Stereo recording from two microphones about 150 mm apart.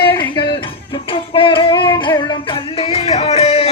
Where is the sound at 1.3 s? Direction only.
35° left (ahead or behind).